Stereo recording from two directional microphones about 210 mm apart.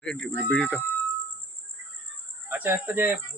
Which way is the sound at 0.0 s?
5° left (ahead or behind).